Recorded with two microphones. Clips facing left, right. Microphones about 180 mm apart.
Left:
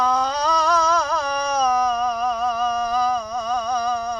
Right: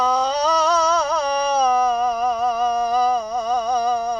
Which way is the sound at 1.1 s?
5° right (ahead or behind).